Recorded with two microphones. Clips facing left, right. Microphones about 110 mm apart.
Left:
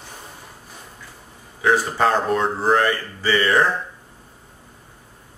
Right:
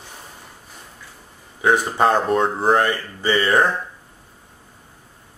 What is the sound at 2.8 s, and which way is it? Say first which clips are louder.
Speech: even; 20° right (ahead or behind).